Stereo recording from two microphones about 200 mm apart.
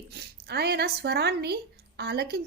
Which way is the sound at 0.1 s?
55° right (ahead or behind).